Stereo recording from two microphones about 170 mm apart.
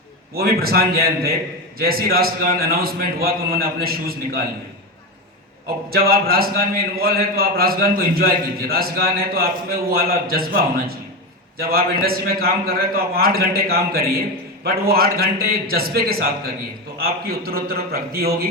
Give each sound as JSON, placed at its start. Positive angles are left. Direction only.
{"t": 0.3, "sound": "a man's voice", "side_deg": -65}
{"t": 5.9, "sound": "a man's voice", "side_deg": -60}